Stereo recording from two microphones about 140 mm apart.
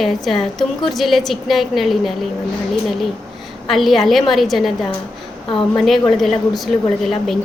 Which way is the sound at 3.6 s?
Centre (ahead or behind).